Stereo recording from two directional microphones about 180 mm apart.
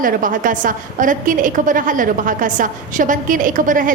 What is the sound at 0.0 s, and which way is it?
A woman's voice, 50° right (ahead or behind).